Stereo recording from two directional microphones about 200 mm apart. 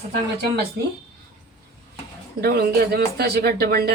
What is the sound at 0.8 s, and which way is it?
Speech, 50° right (ahead or behind).